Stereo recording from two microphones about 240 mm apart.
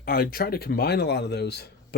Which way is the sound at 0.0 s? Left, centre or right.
Left.